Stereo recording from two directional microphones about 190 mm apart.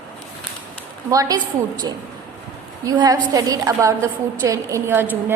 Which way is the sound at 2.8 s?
20° right (ahead or behind).